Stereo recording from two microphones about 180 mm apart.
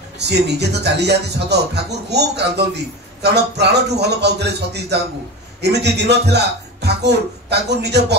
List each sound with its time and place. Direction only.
0.2 s speech: 70° right (ahead or behind)